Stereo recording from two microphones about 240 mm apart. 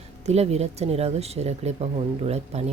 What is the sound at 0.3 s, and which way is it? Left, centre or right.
Speech, right.